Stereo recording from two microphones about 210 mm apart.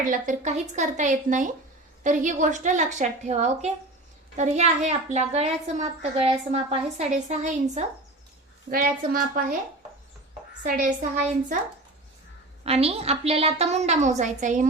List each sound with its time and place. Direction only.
0.0 s a woman's voice: 40° right (ahead or behind)
10.6 s a woman's voice: 40° right (ahead or behind)
12.6 s a woman's voice: 30° right (ahead or behind)